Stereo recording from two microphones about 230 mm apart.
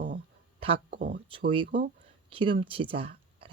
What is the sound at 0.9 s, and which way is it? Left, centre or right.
Speech, right.